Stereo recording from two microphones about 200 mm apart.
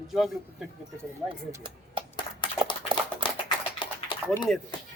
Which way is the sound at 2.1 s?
25° left (ahead or behind).